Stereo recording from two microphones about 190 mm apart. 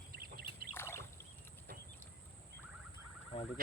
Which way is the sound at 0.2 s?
50° right (ahead or behind).